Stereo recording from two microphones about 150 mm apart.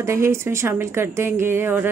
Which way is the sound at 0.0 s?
20° right (ahead or behind).